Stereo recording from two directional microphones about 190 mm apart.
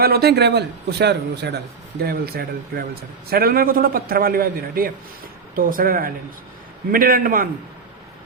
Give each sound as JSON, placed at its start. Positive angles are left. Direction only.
{"t": 0.0, "sound": "a man's voice", "side_deg": -55}